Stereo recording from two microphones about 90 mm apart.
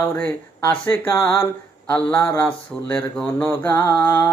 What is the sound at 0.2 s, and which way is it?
Speech, 25° left (ahead or behind).